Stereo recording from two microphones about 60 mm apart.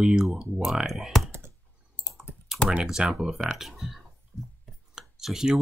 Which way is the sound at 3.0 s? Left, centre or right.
Centre.